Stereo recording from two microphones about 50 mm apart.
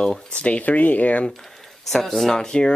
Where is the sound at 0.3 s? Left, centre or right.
Left.